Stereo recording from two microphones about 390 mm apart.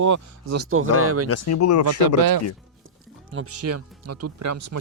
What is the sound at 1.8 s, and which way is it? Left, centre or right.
Speech, right.